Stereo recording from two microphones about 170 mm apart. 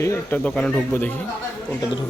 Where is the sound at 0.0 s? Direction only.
15° left (ahead or behind).